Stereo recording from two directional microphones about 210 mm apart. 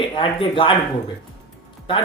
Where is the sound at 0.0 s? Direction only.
25° left (ahead or behind).